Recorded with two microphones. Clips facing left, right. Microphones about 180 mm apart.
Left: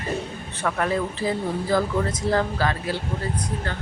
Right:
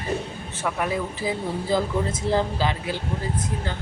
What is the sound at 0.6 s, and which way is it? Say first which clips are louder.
Speech: left 2 dB; 10° right (ahead or behind).